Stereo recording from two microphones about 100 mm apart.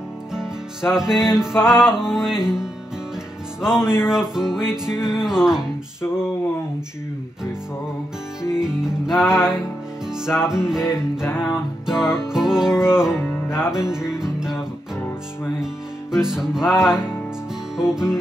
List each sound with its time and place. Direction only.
0.3 s music: 5° right (ahead or behind)
8.5 s music: 5° right (ahead or behind)
10.7 s music: 5° right (ahead or behind)
11.2 s music: 20° left (ahead or behind)
11.8 s music: 5° right (ahead or behind)
15.6 s music: 5° right (ahead or behind)